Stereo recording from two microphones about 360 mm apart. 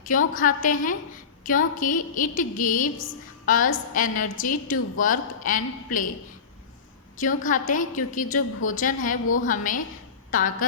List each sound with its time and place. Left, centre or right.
0.0 s a woman's voice: left
7.2 s a woman's voice: left